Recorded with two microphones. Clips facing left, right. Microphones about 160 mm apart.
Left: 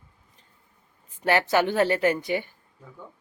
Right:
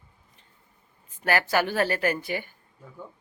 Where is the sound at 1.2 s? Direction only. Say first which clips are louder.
Left 2 dB; 25° left (ahead or behind).